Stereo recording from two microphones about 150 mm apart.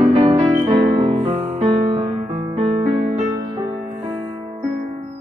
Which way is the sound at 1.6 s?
30° right (ahead or behind).